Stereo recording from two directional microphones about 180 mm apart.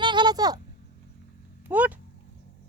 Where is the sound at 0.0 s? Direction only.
25° right (ahead or behind).